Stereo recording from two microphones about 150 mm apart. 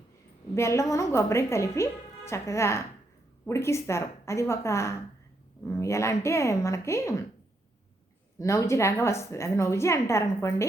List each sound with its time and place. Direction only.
0.5 s a woman's voice: 20° left (ahead or behind)
8.4 s a woman's voice: 20° left (ahead or behind)